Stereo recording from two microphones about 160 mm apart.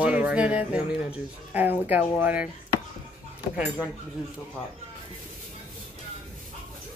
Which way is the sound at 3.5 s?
5° right (ahead or behind).